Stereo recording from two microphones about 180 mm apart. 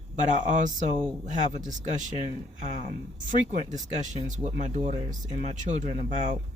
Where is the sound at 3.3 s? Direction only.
45° right (ahead or behind).